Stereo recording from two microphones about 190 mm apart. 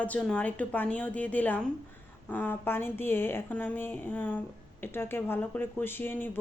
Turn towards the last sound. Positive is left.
turn(degrees=10)  # may be behind; listen again after turning